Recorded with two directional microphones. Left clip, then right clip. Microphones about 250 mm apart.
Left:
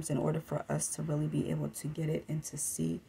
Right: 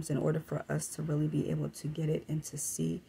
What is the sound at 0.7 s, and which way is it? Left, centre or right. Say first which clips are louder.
Speech: even; centre.